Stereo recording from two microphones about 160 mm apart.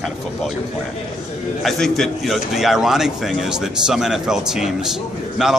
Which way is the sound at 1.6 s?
Centre (ahead or behind).